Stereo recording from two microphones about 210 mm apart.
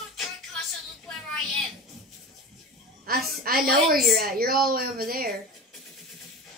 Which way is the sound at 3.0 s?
45° right (ahead or behind).